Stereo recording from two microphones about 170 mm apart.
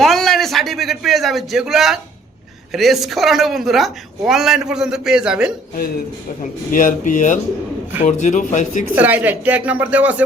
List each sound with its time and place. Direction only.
0.0 s a man's voice: centre (ahead or behind)
6.7 s a man's voice: 50° left (ahead or behind)
9.0 s speech: 10° right (ahead or behind)